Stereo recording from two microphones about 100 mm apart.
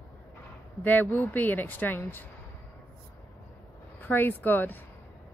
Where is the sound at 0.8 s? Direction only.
20° left (ahead or behind).